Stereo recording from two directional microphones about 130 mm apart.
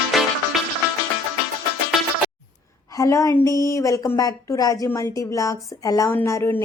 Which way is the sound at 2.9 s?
25° left (ahead or behind).